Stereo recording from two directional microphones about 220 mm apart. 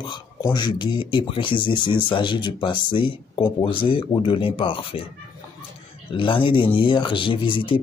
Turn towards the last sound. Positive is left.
turn(degrees=25)  # may be behind; listen again after turning